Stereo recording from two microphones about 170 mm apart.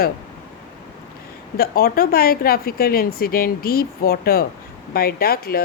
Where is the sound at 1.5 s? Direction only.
60° left (ahead or behind).